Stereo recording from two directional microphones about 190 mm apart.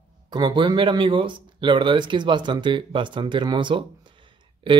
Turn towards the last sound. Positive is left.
turn(degrees=-25)  # may be behind; listen again after turning